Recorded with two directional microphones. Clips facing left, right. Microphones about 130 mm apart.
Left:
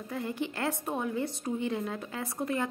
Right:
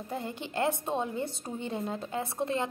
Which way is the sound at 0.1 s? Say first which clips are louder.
Left 2 dB; 25° right (ahead or behind).